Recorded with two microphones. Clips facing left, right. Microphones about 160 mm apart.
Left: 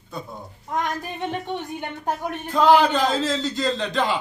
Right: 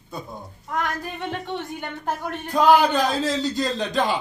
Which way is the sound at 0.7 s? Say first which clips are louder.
Left 1 dB; 20° left (ahead or behind).